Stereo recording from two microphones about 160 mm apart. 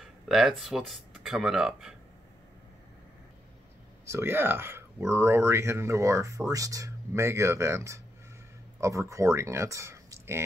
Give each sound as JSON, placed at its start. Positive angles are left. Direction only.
{"t": 0.0, "sound": "speech", "side_deg": 0}
{"t": 4.0, "sound": "speech", "side_deg": -15}